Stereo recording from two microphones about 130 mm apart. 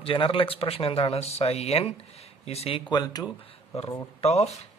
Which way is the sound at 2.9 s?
30° left (ahead or behind).